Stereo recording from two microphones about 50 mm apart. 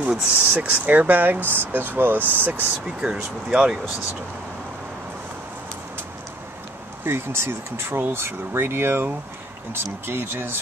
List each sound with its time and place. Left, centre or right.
0.0 s speech: right
0.5 s speech: right
3.0 s speech: centre
7.1 s speech: right